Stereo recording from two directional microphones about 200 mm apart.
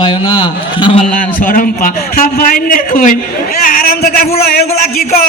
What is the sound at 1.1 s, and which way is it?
A man's voice, 45° left (ahead or behind).